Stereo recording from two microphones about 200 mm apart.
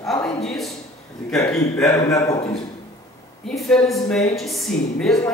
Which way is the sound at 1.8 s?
15° left (ahead or behind).